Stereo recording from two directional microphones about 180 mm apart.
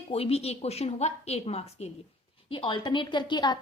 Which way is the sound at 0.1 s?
35° left (ahead or behind).